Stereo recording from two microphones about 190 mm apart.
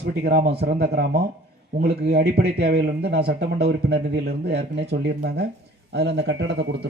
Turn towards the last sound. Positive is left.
turn(degrees=-65)  # may be behind; listen again after turning